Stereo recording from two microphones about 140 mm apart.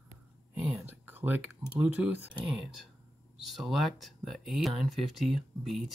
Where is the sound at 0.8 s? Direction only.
15° right (ahead or behind).